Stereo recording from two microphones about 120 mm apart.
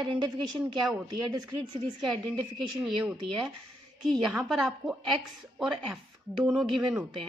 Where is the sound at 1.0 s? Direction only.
35° right (ahead or behind).